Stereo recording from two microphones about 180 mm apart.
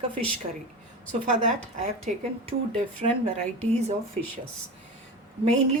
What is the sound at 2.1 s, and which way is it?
Speech, 40° right (ahead or behind).